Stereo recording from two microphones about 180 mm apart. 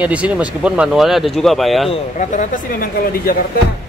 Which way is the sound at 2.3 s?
45° left (ahead or behind).